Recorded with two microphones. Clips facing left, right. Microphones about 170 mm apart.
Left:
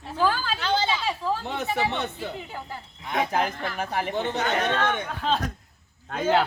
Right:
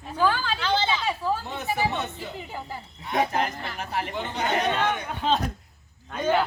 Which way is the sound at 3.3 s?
55° left (ahead or behind).